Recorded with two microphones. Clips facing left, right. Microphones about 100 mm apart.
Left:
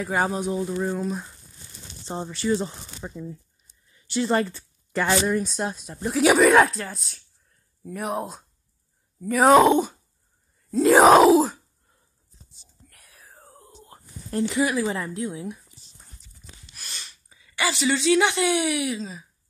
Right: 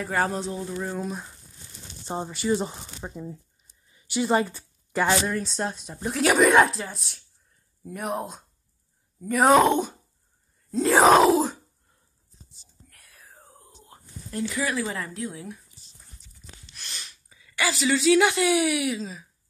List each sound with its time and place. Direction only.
0.1 s speech: 10° left (ahead or behind)
0.9 s speech: centre (ahead or behind)
2.0 s speech: 10° right (ahead or behind)
3.9 s a sound: 10° right (ahead or behind)
5.2 s speech: 5° left (ahead or behind)
10.7 s groan: 5° left (ahead or behind)
12.9 s whispering: centre (ahead or behind)
14.4 s speech: 20° left (ahead or behind)
16.6 s speech: 5° left (ahead or behind)